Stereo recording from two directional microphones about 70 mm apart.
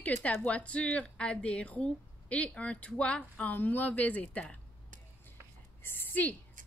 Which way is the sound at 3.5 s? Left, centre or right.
Left.